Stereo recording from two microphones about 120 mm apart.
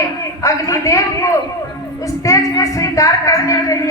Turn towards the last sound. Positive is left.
turn(degrees=25)  # may be behind; listen again after turning